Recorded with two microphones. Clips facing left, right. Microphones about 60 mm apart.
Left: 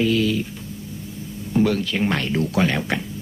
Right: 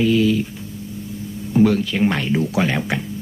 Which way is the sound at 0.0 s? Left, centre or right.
Centre.